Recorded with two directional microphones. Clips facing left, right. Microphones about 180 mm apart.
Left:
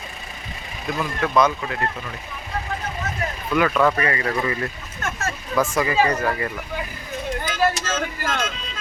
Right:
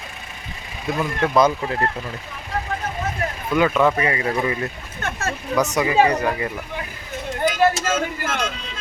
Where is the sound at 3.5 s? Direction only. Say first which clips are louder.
Right 1 dB; 15° right (ahead or behind).